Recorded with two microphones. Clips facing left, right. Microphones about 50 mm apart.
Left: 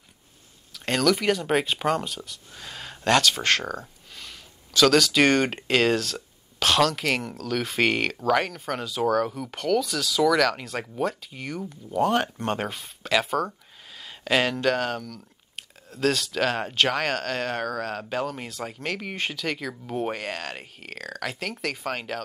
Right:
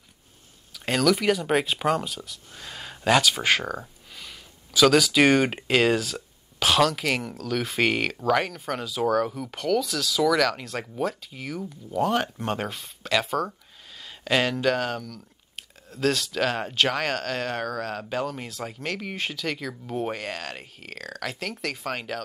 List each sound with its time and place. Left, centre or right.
0.7 s speech: centre